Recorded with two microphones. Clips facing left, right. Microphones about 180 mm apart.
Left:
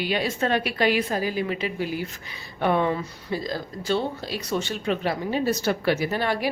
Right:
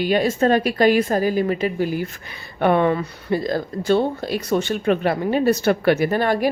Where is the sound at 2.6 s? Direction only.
60° right (ahead or behind).